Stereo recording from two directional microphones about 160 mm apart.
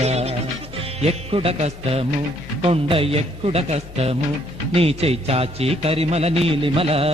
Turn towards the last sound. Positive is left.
turn(degrees=-40)  # may be behind; listen again after turning